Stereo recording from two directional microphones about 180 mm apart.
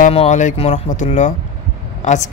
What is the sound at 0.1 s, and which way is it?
Speech, 35° left (ahead or behind).